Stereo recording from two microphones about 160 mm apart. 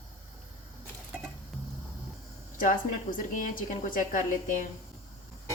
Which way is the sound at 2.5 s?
55° left (ahead or behind).